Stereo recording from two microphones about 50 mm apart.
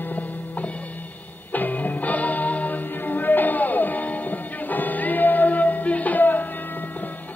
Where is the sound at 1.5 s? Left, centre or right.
Left.